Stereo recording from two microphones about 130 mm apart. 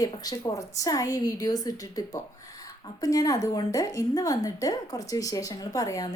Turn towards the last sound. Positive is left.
turn(degrees=25)  # may be behind; listen again after turning